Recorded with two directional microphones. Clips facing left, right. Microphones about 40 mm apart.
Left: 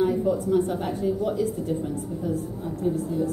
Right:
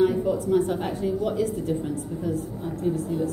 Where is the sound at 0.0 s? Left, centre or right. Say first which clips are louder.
Right 1 dB; right.